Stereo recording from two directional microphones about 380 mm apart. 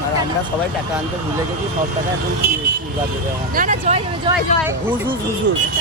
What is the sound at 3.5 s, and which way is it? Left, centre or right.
Speech, right.